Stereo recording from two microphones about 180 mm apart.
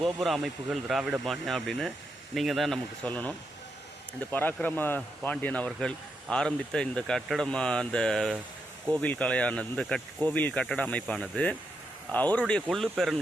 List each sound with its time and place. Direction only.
0.0 s speech: centre (ahead or behind)